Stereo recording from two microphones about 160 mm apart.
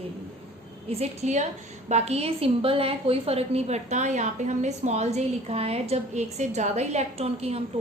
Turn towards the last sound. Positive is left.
turn(degrees=-40)  # may be behind; listen again after turning